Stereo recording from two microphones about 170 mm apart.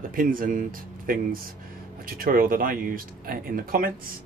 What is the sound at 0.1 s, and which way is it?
Speech, 55° right (ahead or behind).